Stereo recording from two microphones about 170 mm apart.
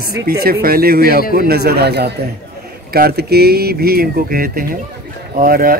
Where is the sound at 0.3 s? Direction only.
65° right (ahead or behind).